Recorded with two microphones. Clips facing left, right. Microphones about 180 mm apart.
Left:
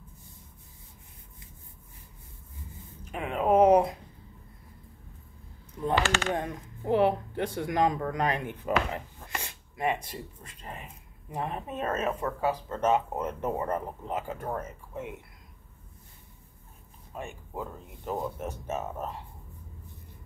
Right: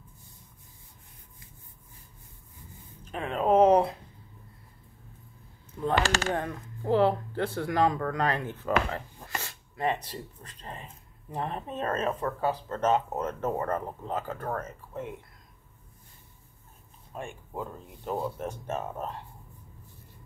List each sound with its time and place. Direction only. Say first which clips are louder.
3.1 s speech: even; 15° left (ahead or behind)
6.0 s speech: even; 35° right (ahead or behind)
6.3 s speech: even; 20° left (ahead or behind)
17.1 s speech: even; 5° left (ahead or behind)